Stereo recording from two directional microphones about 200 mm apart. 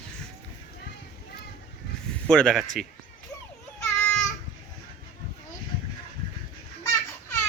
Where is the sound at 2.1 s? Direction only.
5° left (ahead or behind).